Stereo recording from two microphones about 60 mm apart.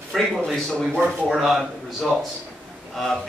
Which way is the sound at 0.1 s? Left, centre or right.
Centre.